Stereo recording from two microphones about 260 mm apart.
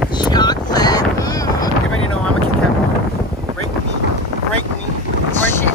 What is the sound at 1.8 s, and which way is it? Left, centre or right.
Wind noise, left.